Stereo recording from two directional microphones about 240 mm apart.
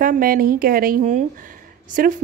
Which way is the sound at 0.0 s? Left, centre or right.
Right.